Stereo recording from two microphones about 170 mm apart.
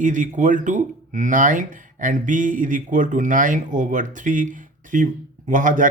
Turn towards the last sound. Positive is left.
turn(degrees=-50)  # may be behind; listen again after turning